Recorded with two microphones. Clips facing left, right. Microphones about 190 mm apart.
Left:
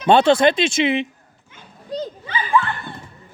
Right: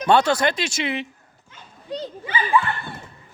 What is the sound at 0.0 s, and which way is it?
Speech, 25° left (ahead or behind).